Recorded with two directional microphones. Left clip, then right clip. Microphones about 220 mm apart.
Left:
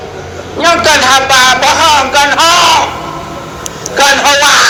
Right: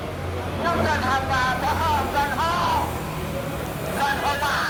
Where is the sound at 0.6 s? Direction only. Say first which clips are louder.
Left 16 dB; 50° left (ahead or behind).